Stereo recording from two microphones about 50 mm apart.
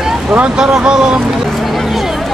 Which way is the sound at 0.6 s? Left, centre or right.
Centre.